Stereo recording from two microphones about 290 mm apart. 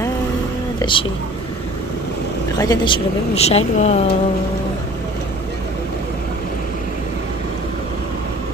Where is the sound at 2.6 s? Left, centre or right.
Centre.